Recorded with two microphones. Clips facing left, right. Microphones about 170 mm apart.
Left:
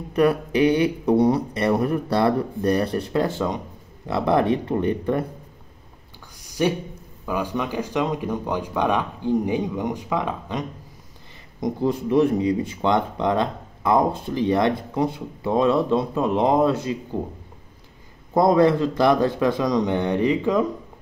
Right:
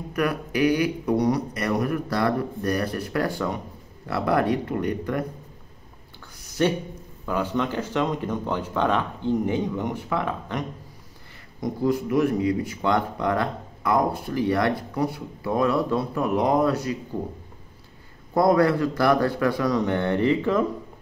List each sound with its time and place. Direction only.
0.1 s speech: 30° left (ahead or behind)
6.3 s a sound: 15° left (ahead or behind)
7.2 s speech: 15° left (ahead or behind)
11.6 s speech: 25° left (ahead or behind)
18.3 s speech: 20° left (ahead or behind)